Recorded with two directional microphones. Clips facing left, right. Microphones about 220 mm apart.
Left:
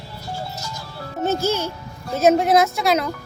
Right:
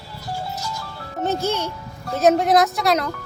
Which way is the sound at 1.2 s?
Centre (ahead or behind).